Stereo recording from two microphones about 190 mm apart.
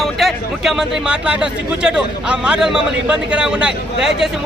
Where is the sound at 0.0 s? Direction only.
Centre (ahead or behind).